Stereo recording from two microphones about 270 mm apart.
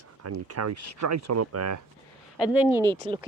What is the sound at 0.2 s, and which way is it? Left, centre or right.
Speech, right.